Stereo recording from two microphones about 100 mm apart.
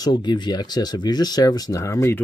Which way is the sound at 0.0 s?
45° left (ahead or behind).